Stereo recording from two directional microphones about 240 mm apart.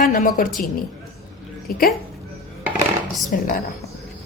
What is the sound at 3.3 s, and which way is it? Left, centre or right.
Speech, left.